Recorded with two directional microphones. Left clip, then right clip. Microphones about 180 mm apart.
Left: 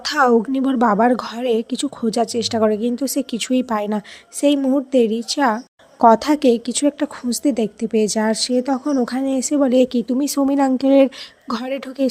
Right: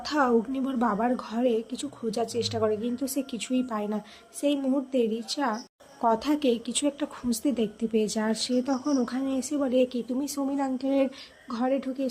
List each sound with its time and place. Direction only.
0.0 s a woman's voice: 45° left (ahead or behind)